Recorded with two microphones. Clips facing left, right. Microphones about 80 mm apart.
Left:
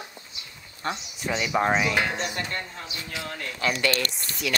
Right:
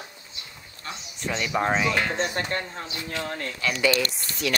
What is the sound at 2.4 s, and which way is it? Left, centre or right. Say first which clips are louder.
Speech: right 3 dB; right.